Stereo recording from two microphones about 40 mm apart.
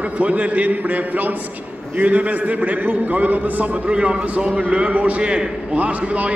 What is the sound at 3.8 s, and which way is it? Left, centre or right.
A man's voice, right.